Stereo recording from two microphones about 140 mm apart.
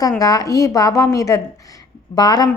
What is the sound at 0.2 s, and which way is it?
A woman's voice, 25° left (ahead or behind).